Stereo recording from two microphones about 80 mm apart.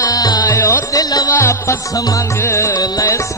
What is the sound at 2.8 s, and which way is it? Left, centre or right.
Music, left.